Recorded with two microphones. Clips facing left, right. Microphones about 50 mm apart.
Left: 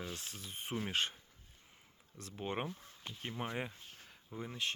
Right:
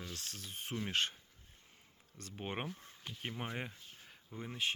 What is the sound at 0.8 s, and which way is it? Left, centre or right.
Speech, centre.